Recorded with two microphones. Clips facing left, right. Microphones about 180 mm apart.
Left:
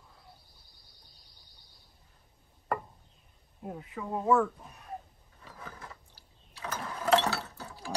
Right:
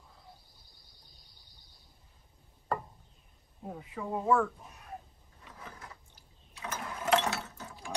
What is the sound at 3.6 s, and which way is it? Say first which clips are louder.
Speech: left 1 dB; 5° left (ahead or behind).